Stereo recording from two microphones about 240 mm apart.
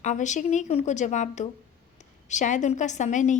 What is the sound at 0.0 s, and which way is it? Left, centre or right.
A woman's voice, left.